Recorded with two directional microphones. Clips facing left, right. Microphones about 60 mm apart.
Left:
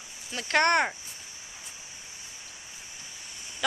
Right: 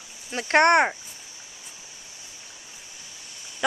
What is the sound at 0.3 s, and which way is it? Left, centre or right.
Speech, right.